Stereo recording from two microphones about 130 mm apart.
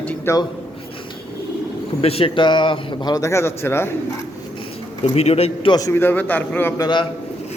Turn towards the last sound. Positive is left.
turn(degrees=35)  # may be behind; listen again after turning